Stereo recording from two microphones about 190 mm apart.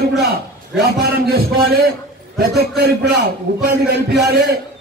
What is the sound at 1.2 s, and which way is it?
A man's voice, 55° right (ahead or behind).